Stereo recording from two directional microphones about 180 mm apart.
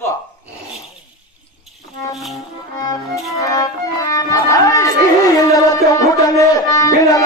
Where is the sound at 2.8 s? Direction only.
20° left (ahead or behind).